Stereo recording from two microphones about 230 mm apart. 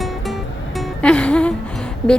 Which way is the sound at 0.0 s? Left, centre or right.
Centre.